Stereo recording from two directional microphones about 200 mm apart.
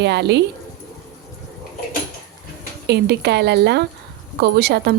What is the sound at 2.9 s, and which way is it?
Speech, 55° right (ahead or behind).